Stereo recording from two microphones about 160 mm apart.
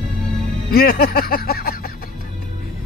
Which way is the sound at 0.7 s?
75° left (ahead or behind).